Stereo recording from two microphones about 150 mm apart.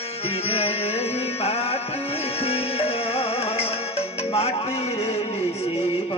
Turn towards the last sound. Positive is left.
turn(degrees=40)  # may be behind; listen again after turning